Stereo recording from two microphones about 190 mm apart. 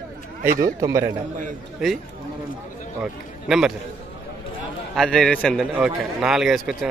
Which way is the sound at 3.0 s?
5° right (ahead or behind).